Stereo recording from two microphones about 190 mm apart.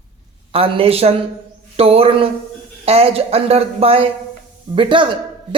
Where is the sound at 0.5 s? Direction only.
30° right (ahead or behind).